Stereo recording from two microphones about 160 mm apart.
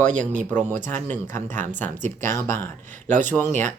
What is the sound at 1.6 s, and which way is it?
Speech, 50° right (ahead or behind).